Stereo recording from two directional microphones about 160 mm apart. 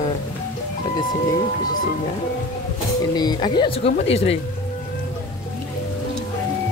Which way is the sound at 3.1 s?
25° left (ahead or behind).